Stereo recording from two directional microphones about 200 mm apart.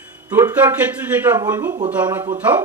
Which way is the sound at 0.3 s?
10° right (ahead or behind).